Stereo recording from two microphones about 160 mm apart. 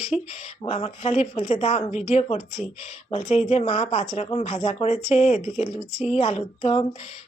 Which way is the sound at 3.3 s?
45° left (ahead or behind).